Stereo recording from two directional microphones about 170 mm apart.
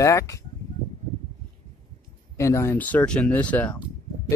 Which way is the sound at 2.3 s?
15° left (ahead or behind).